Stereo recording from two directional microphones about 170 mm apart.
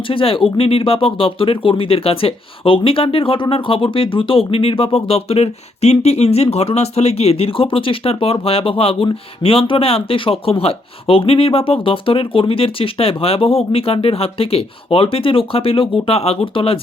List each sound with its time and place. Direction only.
0.1 s speech: 30° left (ahead or behind)